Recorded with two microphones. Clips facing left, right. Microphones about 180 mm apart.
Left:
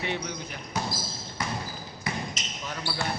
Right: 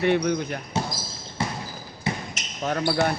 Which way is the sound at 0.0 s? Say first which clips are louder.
Right 11 dB; 55° right (ahead or behind).